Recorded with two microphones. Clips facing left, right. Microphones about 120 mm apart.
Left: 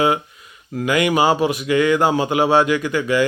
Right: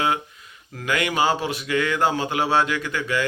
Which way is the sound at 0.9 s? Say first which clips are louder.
Left 5 dB; 10° left (ahead or behind).